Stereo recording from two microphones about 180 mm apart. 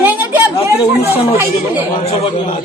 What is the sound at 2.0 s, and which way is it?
Speech, 35° left (ahead or behind).